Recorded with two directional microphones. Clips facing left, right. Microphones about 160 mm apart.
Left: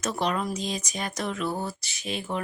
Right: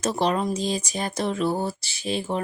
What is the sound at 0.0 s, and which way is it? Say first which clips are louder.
Speech: right 4 dB; 30° right (ahead or behind).